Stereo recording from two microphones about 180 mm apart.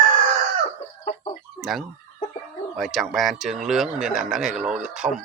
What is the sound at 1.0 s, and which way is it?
Chicken, 40° left (ahead or behind).